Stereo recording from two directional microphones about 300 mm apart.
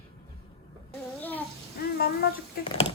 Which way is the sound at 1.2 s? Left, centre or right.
Centre.